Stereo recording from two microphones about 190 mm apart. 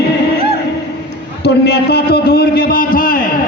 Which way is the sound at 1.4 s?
60° left (ahead or behind).